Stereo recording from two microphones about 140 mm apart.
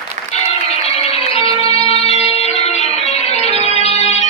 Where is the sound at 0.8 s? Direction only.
45° left (ahead or behind).